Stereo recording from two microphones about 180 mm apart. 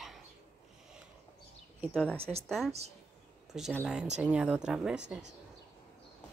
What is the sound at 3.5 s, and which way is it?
A woman's voice, centre (ahead or behind).